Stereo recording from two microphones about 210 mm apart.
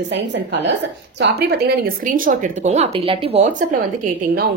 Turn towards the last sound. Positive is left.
turn(degrees=-40)  # may be behind; listen again after turning